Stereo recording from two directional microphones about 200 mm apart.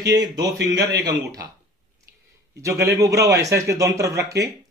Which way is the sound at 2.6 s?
15° right (ahead or behind).